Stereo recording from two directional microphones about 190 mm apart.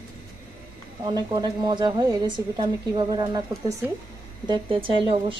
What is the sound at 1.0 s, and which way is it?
A woman's voice, 20° right (ahead or behind).